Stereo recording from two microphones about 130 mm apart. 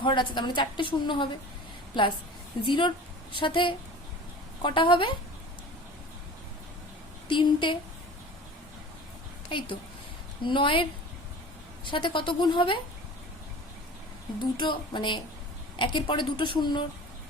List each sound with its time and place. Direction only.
0.0 s a woman's voice: 40° left (ahead or behind)
7.3 s a woman's voice: 40° left (ahead or behind)
9.5 s a woman's voice: 40° left (ahead or behind)
11.9 s a woman's voice: 40° left (ahead or behind)
14.5 s a woman's voice: 35° left (ahead or behind)